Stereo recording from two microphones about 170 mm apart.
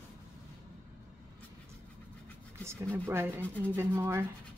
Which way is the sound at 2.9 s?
15° right (ahead or behind).